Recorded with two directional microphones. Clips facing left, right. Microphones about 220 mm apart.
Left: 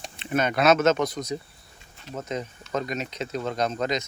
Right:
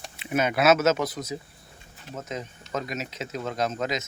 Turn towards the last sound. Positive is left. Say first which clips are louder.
# left 2 dB
turn(degrees=-5)  # may be behind; listen again after turning